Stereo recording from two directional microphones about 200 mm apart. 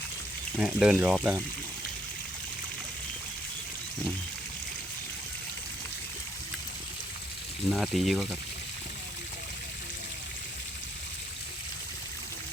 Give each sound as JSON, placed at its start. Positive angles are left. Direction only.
{"t": 0.5, "sound": "speech", "side_deg": -5}
{"t": 7.7, "sound": "speech", "side_deg": 0}